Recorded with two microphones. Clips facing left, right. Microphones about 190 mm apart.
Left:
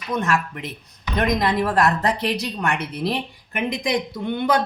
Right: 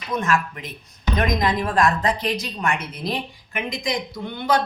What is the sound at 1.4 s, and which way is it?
Speech, 65° left (ahead or behind).